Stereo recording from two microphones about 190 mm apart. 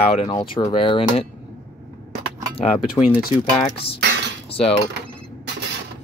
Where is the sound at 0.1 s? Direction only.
30° left (ahead or behind).